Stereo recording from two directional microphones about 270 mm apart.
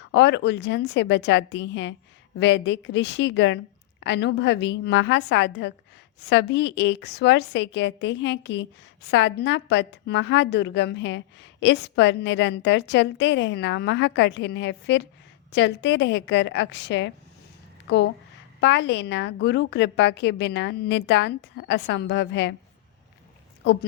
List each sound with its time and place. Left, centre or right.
0.0 s a woman's voice: left